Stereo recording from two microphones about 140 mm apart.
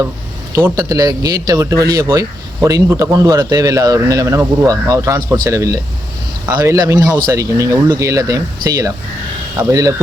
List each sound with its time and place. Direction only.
0.5 s speech: 20° right (ahead or behind)